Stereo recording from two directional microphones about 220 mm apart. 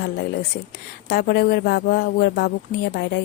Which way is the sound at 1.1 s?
45° left (ahead or behind).